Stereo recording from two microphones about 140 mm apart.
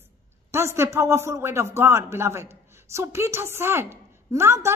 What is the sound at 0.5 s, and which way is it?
Speech, 20° right (ahead or behind).